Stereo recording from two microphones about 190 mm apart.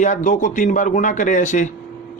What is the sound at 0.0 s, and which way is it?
Speech, 40° left (ahead or behind).